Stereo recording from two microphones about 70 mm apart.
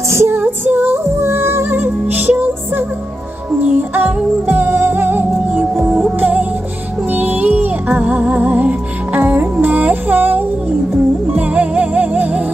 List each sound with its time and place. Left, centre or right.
0.1 s music: right